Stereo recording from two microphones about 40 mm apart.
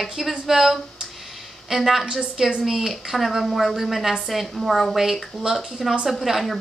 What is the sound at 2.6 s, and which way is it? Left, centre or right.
A woman's voice, centre.